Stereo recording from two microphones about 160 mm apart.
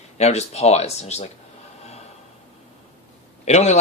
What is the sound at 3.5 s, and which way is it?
Speech, 45° left (ahead or behind).